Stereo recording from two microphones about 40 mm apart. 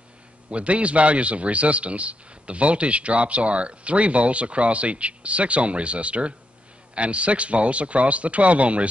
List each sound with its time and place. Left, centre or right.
0.5 s a man's voice: right